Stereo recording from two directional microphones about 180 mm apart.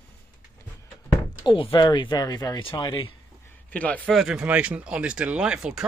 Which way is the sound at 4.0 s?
5° right (ahead or behind).